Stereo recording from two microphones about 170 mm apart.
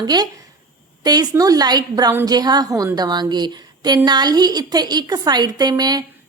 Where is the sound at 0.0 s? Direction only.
25° right (ahead or behind).